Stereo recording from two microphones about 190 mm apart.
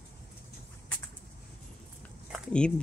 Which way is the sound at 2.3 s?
5° left (ahead or behind).